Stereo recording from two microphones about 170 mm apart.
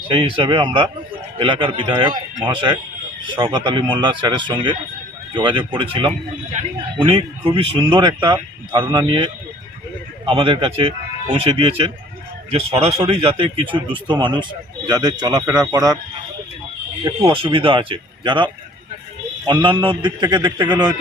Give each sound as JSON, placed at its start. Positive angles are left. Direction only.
{"t": 0.1, "sound": "speech", "side_deg": -30}
{"t": 3.2, "sound": "speech", "side_deg": -30}
{"t": 17.0, "sound": "speech", "side_deg": -20}
{"t": 17.4, "sound": "speech", "side_deg": -30}